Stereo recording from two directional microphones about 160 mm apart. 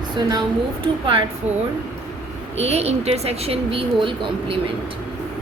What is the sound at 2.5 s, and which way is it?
Speech, 40° right (ahead or behind).